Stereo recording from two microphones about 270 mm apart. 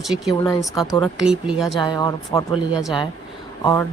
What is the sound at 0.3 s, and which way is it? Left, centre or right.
Speech, centre.